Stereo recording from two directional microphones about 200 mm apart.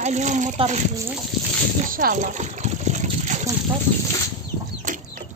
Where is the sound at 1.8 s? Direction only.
45° right (ahead or behind).